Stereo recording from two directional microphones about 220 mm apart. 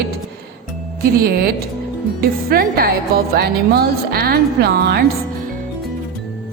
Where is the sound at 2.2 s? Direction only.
45° right (ahead or behind).